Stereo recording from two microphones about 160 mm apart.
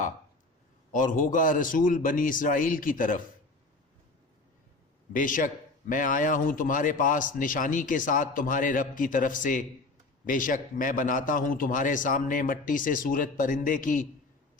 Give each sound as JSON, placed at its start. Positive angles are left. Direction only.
{"t": 0.9, "sound": "a man's voice", "side_deg": 55}
{"t": 5.1, "sound": "a man's voice", "side_deg": 55}